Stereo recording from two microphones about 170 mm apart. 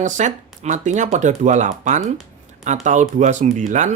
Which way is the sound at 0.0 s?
45° right (ahead or behind).